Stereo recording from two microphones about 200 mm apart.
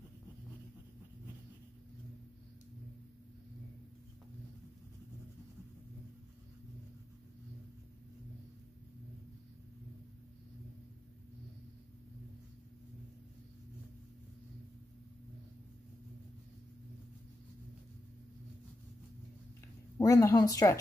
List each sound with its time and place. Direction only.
20.0 s a woman's voice: 15° left (ahead or behind)